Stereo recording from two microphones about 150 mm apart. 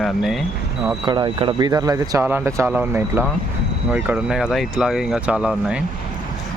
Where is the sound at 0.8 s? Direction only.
30° right (ahead or behind); by 5.8 s 5° right (ahead or behind).